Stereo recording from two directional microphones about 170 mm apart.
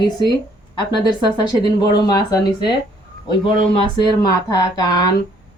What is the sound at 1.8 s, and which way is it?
Speech, 25° left (ahead or behind).